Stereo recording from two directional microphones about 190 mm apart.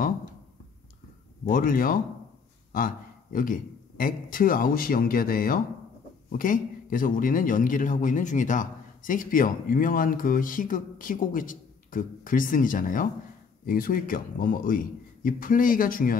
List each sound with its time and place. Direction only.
1.5 s a man's voice: 45° left (ahead or behind)